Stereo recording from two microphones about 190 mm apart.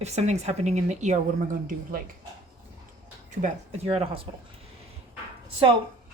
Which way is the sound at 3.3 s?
35° right (ahead or behind).